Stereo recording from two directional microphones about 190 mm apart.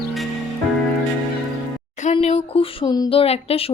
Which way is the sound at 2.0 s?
35° left (ahead or behind).